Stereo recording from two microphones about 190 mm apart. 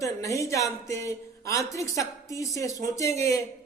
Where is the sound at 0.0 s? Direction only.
15° left (ahead or behind).